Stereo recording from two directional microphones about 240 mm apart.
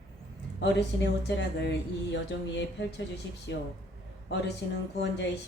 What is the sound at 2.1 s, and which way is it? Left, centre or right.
A woman's voice, left.